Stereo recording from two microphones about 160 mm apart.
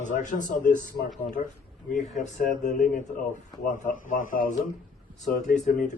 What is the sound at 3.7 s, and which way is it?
A man's voice, 55° left (ahead or behind).